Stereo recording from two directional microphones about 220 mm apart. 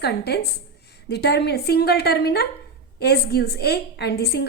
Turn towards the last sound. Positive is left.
turn(degrees=50)  # may be behind; listen again after turning